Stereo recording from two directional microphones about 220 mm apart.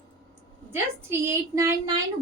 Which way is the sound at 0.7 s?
10° right (ahead or behind).